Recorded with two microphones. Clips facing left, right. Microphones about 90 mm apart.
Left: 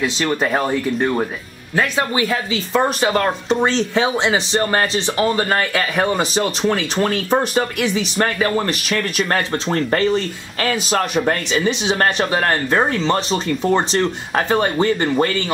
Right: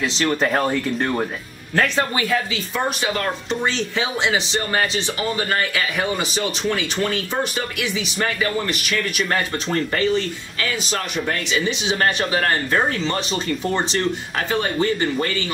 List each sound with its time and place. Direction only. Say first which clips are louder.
0.0 s speech: left 1 dB; 10° left (ahead or behind)
2.2 s speech: left 1 dB; 30° left (ahead or behind)
3.1 s speech: left 6 dB; 40° left (ahead or behind)
10.6 s a man's voice: left 6 dB; 50° left (ahead or behind)
12.3 s speech: left 2 dB; 35° left (ahead or behind)